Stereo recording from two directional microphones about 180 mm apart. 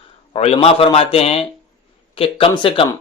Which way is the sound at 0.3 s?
35° left (ahead or behind).